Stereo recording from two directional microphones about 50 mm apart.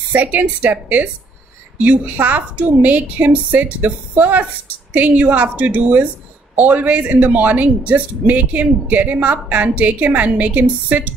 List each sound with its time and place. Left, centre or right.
0.1 s speech: right